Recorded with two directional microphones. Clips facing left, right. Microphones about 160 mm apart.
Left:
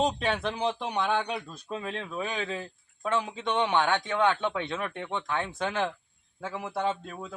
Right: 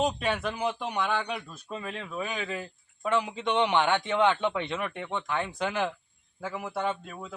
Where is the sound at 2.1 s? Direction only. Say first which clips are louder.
Even; 5° right (ahead or behind).